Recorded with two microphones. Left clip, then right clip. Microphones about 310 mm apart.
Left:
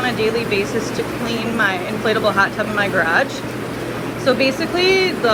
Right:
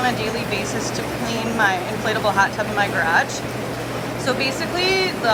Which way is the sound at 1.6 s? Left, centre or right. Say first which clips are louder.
Left 1 dB; centre.